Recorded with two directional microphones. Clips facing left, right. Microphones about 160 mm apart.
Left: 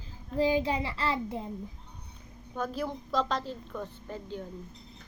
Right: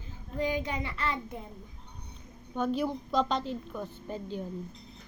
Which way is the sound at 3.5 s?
15° right (ahead or behind).